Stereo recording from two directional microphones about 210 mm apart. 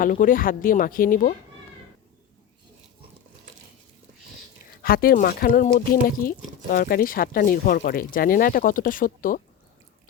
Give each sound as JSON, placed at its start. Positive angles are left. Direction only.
{"t": 0.0, "sound": "speech", "side_deg": 40}
{"t": 4.8, "sound": "speech", "side_deg": 45}